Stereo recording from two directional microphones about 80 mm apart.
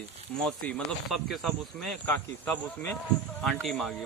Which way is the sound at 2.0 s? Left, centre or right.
Left.